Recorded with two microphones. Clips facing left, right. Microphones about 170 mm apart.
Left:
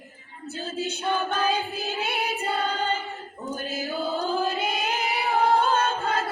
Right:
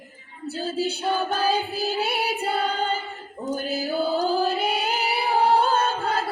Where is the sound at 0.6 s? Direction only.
35° right (ahead or behind).